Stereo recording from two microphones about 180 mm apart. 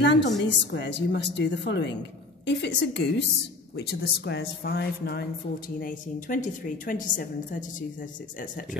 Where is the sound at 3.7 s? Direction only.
65° left (ahead or behind); by 8.7 s 50° left (ahead or behind).